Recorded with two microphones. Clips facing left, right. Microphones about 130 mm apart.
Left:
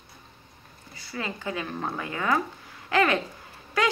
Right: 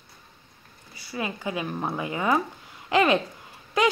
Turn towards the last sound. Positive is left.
turn(degrees=-20)  # may be behind; listen again after turning